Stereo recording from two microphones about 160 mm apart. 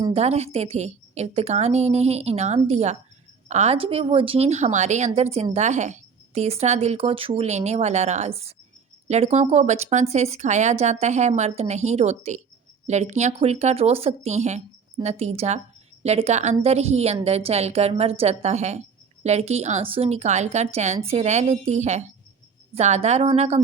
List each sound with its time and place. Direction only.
0.1 s a woman's voice: 40° right (ahead or behind)